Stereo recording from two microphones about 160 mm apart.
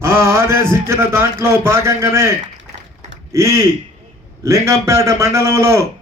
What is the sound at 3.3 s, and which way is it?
A man's voice, 20° right (ahead or behind).